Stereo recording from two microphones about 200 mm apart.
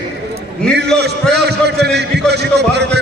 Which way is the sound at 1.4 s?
55° right (ahead or behind).